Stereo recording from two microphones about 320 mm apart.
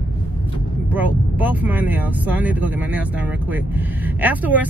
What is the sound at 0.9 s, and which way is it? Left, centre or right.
Speech, centre.